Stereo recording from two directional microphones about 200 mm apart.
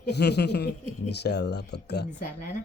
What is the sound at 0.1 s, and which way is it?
Speech, 55° left (ahead or behind).